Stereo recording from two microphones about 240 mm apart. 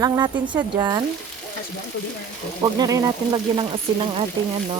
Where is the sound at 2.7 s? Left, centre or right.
Centre.